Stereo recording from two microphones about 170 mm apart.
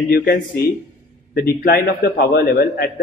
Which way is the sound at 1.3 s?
65° left (ahead or behind).